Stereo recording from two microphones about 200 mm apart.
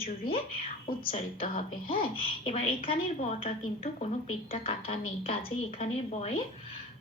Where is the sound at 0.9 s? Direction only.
25° left (ahead or behind).